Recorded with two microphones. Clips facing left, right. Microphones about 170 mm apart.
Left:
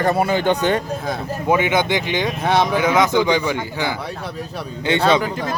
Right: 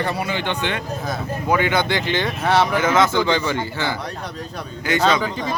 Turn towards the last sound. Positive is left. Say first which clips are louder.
# left 2 dB
turn(degrees=30)  # may be behind; listen again after turning